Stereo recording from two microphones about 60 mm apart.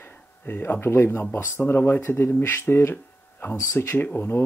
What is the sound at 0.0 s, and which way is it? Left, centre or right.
Speech, left.